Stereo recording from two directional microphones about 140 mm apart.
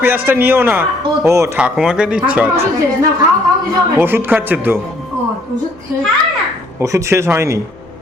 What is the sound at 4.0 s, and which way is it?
Speech, 15° right (ahead or behind).